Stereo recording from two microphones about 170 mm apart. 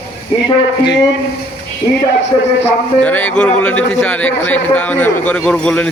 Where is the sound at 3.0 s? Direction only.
10° left (ahead or behind).